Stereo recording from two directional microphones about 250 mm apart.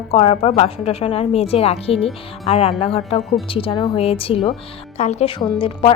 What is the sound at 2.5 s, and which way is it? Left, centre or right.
A woman's voice, left.